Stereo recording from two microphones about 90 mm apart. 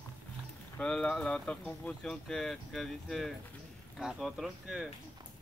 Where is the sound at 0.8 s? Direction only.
10° left (ahead or behind).